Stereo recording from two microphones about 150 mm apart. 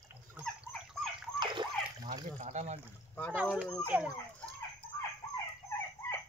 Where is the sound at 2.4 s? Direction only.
50° right (ahead or behind).